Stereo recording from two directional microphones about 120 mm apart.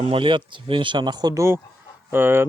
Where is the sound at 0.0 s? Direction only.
50° right (ahead or behind).